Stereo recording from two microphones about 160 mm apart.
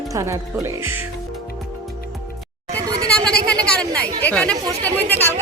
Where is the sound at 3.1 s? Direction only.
5° left (ahead or behind).